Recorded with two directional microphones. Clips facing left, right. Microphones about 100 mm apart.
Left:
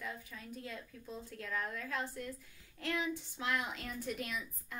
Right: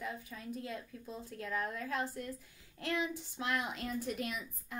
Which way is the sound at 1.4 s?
20° right (ahead or behind).